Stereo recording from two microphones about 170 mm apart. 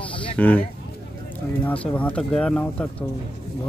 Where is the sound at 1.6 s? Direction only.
10° left (ahead or behind).